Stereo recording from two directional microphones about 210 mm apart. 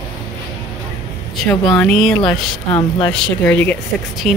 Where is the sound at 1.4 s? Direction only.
5° left (ahead or behind).